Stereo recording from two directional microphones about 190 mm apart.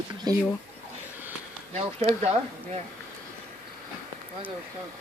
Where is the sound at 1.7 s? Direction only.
35° right (ahead or behind).